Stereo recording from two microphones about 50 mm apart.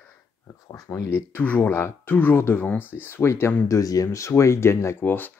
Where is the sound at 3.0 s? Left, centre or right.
Left.